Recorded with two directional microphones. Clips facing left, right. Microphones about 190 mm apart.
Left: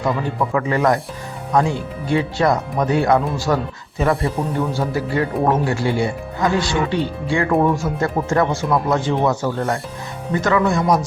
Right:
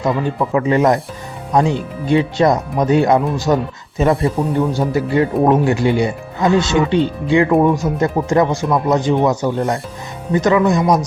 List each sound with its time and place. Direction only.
0.0 s speech: 20° right (ahead or behind)